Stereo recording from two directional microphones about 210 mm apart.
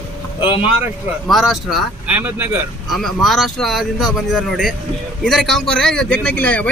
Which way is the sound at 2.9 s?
Centre (ahead or behind).